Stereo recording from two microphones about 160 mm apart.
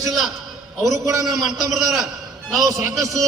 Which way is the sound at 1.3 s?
Centre (ahead or behind).